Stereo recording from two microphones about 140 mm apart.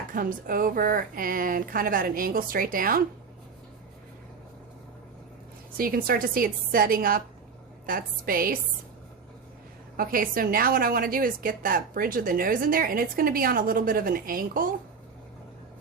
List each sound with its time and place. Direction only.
0.1 s a woman's voice: 90° right
5.7 s a woman's voice: 90° right
10.0 s a woman's voice: 90° right